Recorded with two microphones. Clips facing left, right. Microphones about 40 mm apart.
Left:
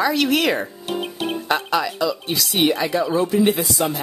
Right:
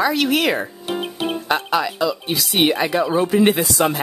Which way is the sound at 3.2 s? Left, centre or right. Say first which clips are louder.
Right 2 dB; right.